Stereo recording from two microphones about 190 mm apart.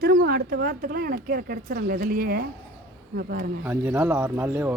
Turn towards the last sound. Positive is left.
turn(degrees=-10)  # may be behind; listen again after turning